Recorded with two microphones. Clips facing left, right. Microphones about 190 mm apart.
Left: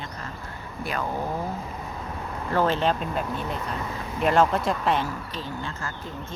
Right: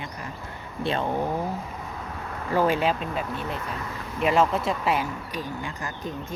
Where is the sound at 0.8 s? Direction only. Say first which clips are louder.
Right 4 dB; 25° right (ahead or behind).